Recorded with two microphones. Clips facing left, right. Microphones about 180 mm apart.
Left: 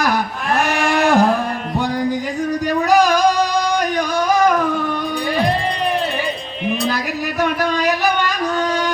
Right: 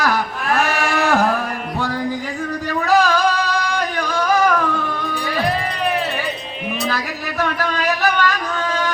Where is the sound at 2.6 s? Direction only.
15° left (ahead or behind).